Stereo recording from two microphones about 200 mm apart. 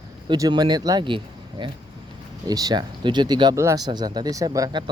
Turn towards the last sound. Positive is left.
turn(degrees=-20)  # may be behind; listen again after turning